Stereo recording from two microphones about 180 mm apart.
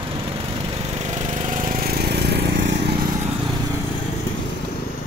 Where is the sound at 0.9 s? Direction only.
40° right (ahead or behind); by 3.0 s 70° right (ahead or behind).